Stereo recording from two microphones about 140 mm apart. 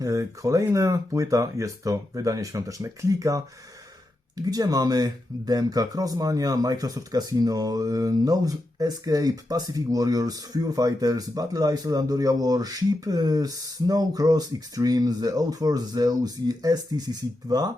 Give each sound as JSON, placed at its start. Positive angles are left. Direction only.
{"t": 0.0, "sound": "speech", "side_deg": -25}
{"t": 4.4, "sound": "speech", "side_deg": -25}